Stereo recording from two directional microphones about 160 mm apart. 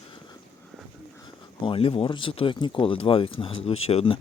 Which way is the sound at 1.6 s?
35° left (ahead or behind).